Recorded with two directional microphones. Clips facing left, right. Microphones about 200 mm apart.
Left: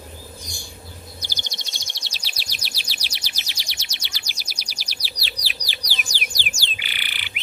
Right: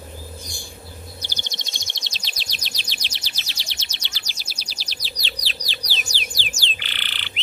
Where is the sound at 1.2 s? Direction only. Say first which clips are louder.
Right 1 dB; 10° left (ahead or behind).